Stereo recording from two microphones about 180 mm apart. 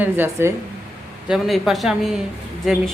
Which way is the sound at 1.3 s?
Centre (ahead or behind).